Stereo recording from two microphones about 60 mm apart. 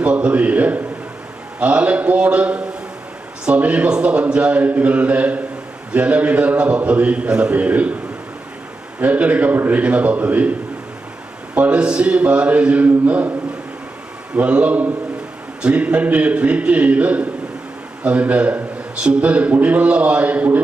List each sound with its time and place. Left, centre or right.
0.0 s a man's voice: centre
9.0 s a man's voice: right
11.5 s a man's voice: right
14.3 s a man's voice: right